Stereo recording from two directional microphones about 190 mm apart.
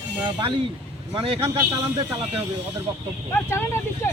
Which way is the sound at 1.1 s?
30° right (ahead or behind).